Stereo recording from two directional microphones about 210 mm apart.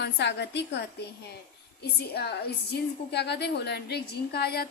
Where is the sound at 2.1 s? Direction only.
50° left (ahead or behind).